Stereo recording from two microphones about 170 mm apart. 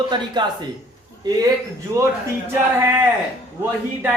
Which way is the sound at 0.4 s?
25° right (ahead or behind).